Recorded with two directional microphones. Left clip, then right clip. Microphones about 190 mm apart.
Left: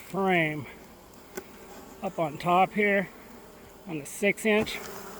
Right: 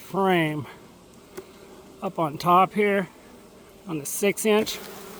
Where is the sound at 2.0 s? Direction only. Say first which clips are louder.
Right 4 dB; 35° right (ahead or behind).